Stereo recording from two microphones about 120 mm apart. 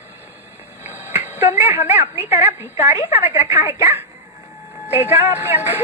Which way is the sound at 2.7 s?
60° left (ahead or behind).